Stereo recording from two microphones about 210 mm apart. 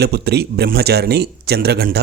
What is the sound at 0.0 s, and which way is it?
Speech, 50° right (ahead or behind).